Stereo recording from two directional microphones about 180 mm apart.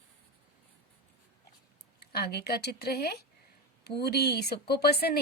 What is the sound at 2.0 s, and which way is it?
A woman's voice, 60° left (ahead or behind).